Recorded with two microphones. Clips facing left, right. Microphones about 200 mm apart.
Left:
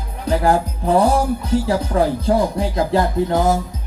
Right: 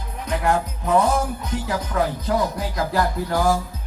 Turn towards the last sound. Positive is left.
turn(degrees=20)  # may be behind; listen again after turning